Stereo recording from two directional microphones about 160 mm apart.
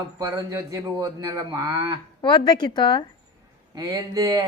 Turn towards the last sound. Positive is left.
turn(degrees=-20)  # may be behind; listen again after turning